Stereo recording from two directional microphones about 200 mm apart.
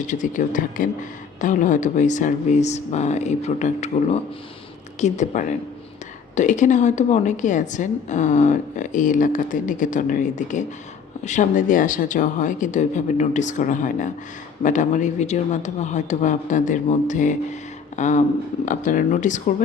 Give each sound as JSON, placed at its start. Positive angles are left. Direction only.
{"t": 0.1, "sound": "a woman's voice", "side_deg": 40}